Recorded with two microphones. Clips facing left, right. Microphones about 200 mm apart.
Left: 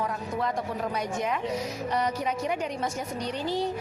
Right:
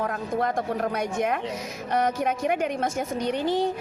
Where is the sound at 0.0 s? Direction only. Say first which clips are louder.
Right 3 dB; 50° right (ahead or behind).